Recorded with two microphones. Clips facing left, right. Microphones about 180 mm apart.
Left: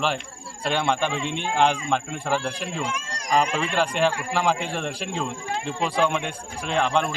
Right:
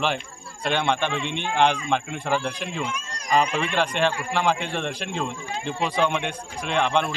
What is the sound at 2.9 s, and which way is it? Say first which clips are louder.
Speech: left 2 dB; 90° left.